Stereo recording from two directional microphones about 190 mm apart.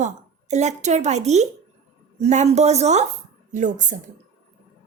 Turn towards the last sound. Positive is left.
turn(degrees=-40)  # may be behind; listen again after turning